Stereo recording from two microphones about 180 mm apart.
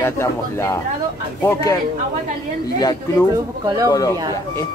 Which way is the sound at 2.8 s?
20° left (ahead or behind).